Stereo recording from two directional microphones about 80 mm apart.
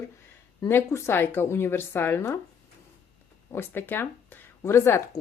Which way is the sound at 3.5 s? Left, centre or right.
Left.